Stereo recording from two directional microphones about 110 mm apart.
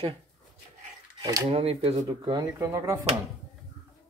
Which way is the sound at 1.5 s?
60° right (ahead or behind).